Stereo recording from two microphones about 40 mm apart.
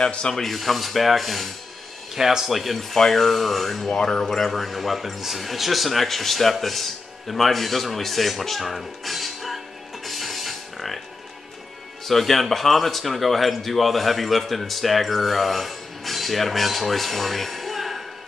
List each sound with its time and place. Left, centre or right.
0.0 s speech: left
0.4 s speech: centre
2.1 s speech: centre
10.0 s music: centre
12.1 s speech: centre